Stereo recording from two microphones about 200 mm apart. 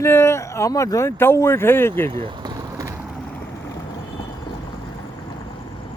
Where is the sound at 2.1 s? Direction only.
20° right (ahead or behind).